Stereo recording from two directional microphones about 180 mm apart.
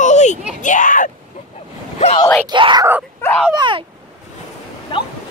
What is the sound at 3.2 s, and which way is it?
Speech, 5° left (ahead or behind).